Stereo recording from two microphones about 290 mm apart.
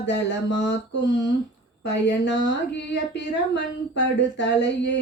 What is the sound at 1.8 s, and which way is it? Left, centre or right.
Speech, left.